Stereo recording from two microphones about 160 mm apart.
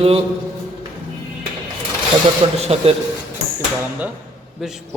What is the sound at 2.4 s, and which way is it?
Speech, 40° right (ahead or behind).